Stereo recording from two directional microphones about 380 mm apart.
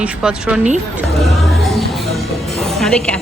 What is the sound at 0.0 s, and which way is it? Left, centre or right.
Speech, centre.